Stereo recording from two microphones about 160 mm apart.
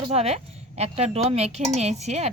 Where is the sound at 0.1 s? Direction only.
40° right (ahead or behind).